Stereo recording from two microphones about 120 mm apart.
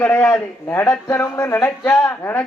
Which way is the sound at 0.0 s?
15° left (ahead or behind).